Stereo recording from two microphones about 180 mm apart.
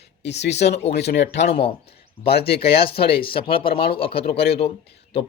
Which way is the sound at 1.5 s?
30° left (ahead or behind).